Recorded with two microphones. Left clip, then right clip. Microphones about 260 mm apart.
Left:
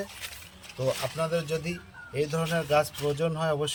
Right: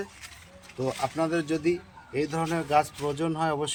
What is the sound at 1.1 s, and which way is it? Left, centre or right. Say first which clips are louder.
A man's voice: right 1 dB; centre.